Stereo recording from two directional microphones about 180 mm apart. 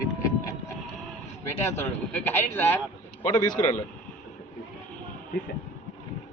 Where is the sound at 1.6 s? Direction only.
15° left (ahead or behind).